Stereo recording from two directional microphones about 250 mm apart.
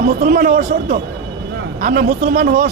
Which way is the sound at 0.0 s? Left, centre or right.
Right.